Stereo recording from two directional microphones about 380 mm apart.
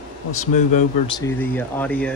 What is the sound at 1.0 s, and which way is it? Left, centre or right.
Speech, centre.